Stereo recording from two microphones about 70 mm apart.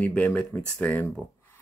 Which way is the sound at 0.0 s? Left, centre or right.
Left.